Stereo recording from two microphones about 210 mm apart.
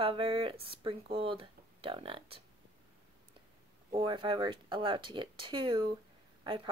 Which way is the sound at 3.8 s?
25° right (ahead or behind).